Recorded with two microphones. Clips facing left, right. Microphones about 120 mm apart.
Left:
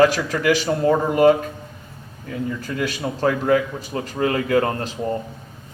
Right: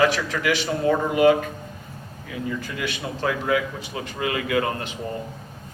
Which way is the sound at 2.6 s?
40° left (ahead or behind).